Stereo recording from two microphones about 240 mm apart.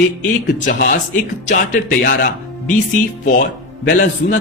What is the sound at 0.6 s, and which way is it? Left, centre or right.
A man's voice, left.